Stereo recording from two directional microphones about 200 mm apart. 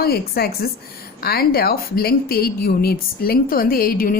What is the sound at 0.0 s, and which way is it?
A woman's voice, 50° left (ahead or behind).